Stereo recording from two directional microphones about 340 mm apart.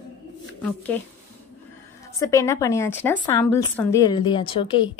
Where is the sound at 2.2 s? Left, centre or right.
Centre.